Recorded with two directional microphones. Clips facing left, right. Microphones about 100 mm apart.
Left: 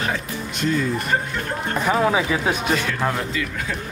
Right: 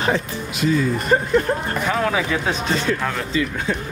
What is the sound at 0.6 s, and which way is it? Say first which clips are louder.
Speech: right 3 dB; 5° right (ahead or behind).